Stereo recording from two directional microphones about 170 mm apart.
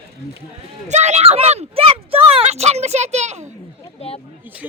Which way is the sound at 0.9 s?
40° right (ahead or behind).